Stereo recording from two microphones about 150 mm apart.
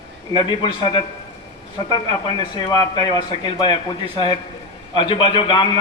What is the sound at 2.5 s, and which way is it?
Speech, 25° left (ahead or behind).